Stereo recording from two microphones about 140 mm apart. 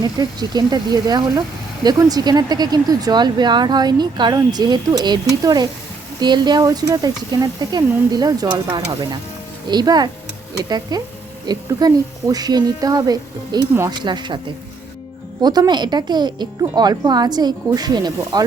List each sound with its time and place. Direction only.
0.0 s speech: 30° right (ahead or behind)
15.4 s speech: 30° right (ahead or behind)